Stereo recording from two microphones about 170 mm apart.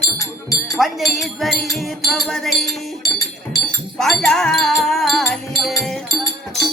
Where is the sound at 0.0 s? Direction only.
20° left (ahead or behind).